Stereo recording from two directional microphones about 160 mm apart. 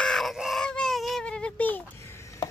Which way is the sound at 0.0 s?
Centre (ahead or behind).